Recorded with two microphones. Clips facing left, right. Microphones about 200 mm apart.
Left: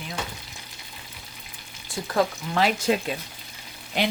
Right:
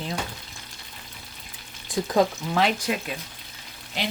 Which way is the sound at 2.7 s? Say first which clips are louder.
Left 5 dB; 25° left (ahead or behind).